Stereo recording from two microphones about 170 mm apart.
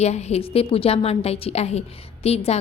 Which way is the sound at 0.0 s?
40° left (ahead or behind).